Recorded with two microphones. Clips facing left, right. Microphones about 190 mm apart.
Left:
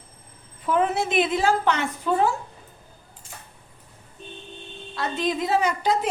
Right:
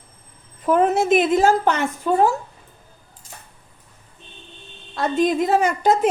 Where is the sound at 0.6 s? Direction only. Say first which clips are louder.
Right 5 dB; 45° right (ahead or behind).